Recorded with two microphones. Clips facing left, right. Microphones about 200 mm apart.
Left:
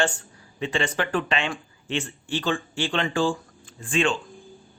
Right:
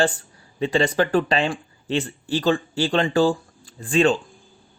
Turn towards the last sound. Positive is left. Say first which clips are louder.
# right 6 dB
turn(degrees=-35)  # may be behind; listen again after turning